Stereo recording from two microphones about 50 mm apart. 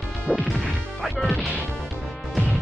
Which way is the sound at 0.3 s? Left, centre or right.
Right.